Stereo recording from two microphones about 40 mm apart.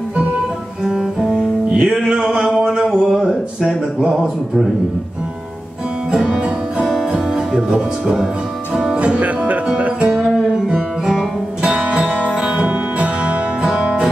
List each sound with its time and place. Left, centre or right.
0.8 s music: centre
2.8 s music: centre
6.2 s music: centre
8.9 s music: right
10.5 s music: centre